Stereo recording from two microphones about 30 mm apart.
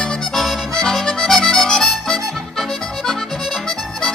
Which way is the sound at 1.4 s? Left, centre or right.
Centre.